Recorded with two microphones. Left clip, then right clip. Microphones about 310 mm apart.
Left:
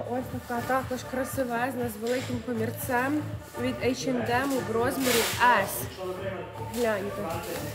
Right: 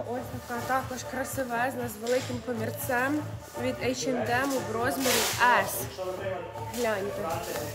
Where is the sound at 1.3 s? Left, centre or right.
Centre.